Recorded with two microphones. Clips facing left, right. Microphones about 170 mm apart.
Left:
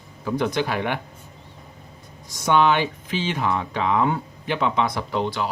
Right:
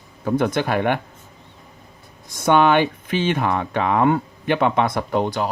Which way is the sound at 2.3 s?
55° right (ahead or behind).